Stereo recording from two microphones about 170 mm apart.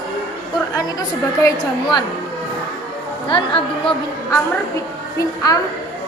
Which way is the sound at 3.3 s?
30° left (ahead or behind).